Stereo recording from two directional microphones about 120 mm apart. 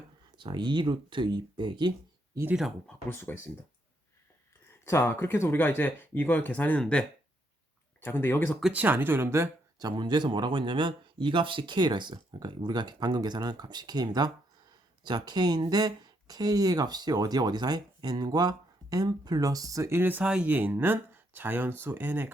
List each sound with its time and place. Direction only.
0.3 s speech: 40° right (ahead or behind)
2.5 s speech: 5° right (ahead or behind)
3.1 s speech: 20° left (ahead or behind)
4.9 s speech: 20° left (ahead or behind)
8.0 s speech: 20° left (ahead or behind)
8.6 s speech: 15° right (ahead or behind)
9.8 s speech: 40° right (ahead or behind); by 22.3 s 15° right (ahead or behind)